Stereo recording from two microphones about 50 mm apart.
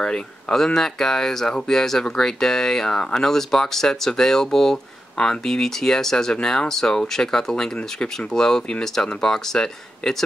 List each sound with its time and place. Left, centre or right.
0.0 s speech: centre
3.3 s speech: centre
7.7 s speech: left
8.3 s speech: centre